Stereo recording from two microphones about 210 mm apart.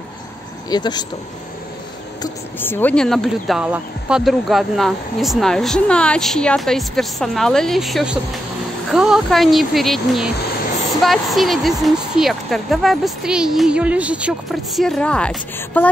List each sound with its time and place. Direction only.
0.7 s speech: 20° left (ahead or behind)
2.2 s speech: 10° left (ahead or behind)